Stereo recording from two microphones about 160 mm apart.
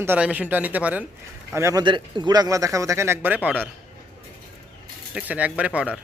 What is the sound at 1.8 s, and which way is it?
Speech, 30° right (ahead or behind).